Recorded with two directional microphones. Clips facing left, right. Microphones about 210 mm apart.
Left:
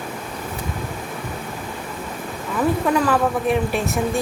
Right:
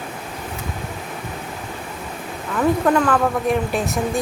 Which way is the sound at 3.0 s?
Centre (ahead or behind).